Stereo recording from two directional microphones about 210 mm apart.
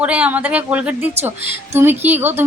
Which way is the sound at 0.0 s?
5° right (ahead or behind).